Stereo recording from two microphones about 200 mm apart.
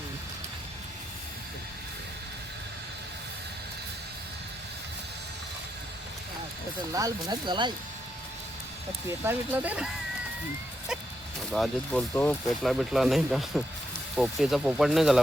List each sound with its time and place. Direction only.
6.9 s speech: 20° right (ahead or behind)
9.0 s speech: 10° right (ahead or behind)
11.5 s speech: 5° left (ahead or behind)
12.7 s speech: centre (ahead or behind)